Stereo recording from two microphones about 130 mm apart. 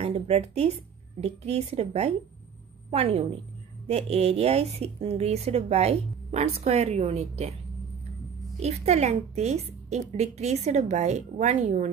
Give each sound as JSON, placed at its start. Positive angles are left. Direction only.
{"t": 0.0, "sound": "a woman's voice", "side_deg": -55}
{"t": 8.5, "sound": "a woman's voice", "side_deg": -55}